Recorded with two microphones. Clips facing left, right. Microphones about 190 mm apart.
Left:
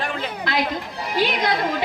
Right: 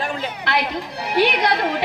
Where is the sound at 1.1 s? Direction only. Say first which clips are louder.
Right 3 dB; 65° right (ahead or behind).